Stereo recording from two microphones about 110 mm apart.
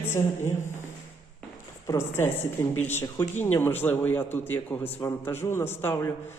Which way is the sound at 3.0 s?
35° left (ahead or behind).